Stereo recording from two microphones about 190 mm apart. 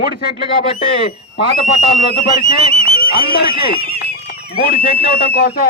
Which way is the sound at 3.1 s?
50° left (ahead or behind).